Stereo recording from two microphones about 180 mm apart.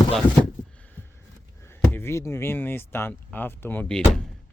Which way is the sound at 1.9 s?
15° left (ahead or behind).